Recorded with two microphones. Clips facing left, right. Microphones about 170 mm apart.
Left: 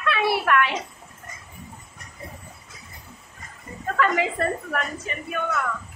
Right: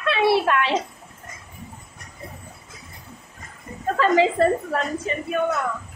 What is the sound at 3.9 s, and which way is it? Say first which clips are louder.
A woman's voice: right 5 dB; 30° right (ahead or behind).